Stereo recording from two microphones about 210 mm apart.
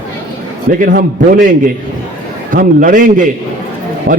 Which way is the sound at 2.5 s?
40° right (ahead or behind).